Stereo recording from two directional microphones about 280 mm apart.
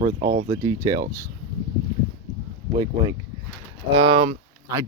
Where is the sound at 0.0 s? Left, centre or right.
Centre.